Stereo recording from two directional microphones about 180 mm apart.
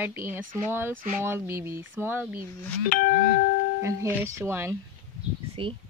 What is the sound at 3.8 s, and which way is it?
Speech, 15° right (ahead or behind).